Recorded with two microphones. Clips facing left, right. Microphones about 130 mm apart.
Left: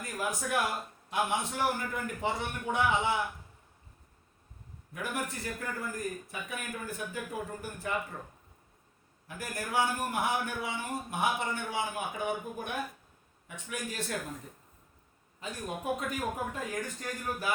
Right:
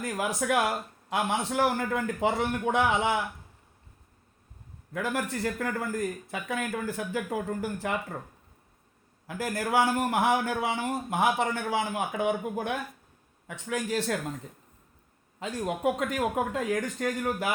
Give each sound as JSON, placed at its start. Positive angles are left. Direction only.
{"t": 0.2, "sound": "speech", "side_deg": -90}
{"t": 4.9, "sound": "speech", "side_deg": -90}
{"t": 9.2, "sound": "speech", "side_deg": -90}
{"t": 15.4, "sound": "speech", "side_deg": -90}